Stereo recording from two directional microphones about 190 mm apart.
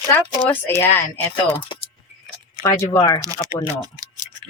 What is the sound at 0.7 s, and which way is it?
Speech, 10° left (ahead or behind).